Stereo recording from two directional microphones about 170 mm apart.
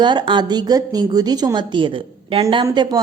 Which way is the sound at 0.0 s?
25° right (ahead or behind).